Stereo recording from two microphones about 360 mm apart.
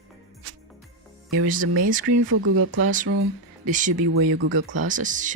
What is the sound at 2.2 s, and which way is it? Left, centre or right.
Speech, right.